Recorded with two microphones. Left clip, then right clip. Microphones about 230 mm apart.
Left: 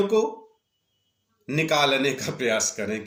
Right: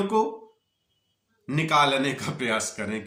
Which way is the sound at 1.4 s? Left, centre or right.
Centre.